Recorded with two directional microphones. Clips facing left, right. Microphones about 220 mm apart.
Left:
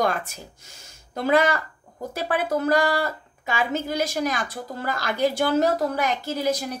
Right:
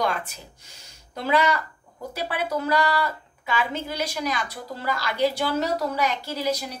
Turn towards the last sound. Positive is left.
turn(degrees=50)  # may be behind; listen again after turning